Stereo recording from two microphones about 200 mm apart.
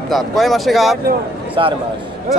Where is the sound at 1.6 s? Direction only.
25° right (ahead or behind).